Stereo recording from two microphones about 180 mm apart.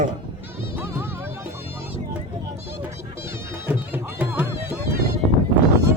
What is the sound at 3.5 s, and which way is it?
Music, 10° right (ahead or behind).